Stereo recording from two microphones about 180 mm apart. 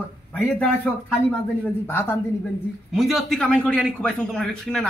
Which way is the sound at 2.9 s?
Centre (ahead or behind).